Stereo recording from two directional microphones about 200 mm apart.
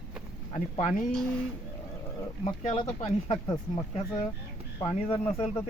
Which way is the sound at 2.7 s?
25° left (ahead or behind).